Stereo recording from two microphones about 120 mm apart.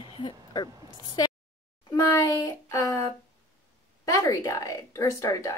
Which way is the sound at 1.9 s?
30° left (ahead or behind).